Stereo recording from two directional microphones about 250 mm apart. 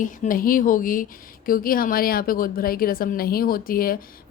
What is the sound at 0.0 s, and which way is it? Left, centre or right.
A woman's voice, left.